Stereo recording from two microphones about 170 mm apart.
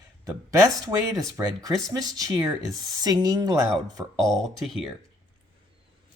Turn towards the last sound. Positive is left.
turn(degrees=0)  # may be behind; listen again after turning